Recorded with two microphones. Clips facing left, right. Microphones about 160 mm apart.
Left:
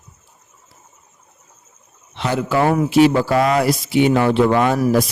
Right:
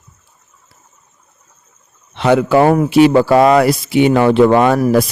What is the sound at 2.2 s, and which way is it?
Speech, 65° right (ahead or behind).